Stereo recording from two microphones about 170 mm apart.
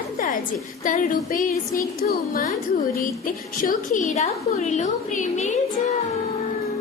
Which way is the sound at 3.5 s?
55° left (ahead or behind).